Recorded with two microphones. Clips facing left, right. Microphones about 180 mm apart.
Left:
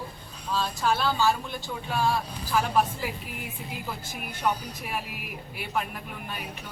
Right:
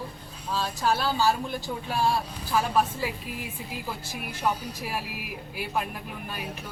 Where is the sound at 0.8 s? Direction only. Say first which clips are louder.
Right 1 dB; 40° right (ahead or behind).